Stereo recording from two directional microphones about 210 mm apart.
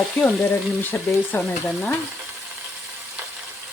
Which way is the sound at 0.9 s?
10° left (ahead or behind).